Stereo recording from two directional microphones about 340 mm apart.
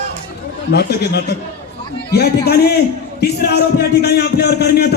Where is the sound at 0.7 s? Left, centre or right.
Left.